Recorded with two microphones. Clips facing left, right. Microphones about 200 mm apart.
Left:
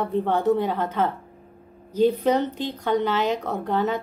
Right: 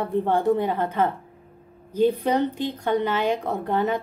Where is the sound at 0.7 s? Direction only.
55° right (ahead or behind).